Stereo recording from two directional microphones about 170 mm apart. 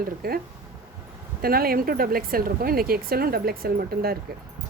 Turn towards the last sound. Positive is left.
turn(degrees=-65)  # may be behind; listen again after turning